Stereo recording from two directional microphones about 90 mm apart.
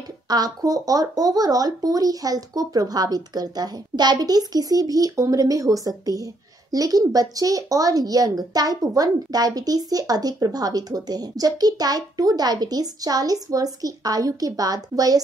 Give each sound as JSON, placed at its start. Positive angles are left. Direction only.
{"t": 0.3, "sound": "speech", "side_deg": -45}